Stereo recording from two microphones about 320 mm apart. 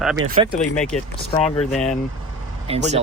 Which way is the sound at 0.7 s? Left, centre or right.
Centre.